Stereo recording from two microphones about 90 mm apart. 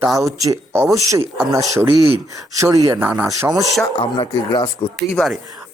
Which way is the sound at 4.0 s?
55° left (ahead or behind).